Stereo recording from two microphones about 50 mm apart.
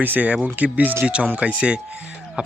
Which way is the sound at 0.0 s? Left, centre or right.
Right.